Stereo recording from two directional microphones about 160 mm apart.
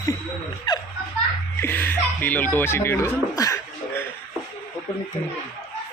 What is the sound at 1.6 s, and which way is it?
Speech, 10° left (ahead or behind).